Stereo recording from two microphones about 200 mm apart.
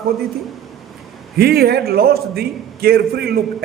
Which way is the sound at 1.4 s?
50° right (ahead or behind).